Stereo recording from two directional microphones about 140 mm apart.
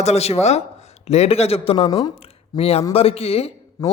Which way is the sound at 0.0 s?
50° left (ahead or behind).